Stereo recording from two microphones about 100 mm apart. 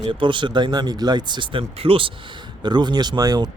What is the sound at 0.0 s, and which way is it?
Speech, 55° right (ahead or behind).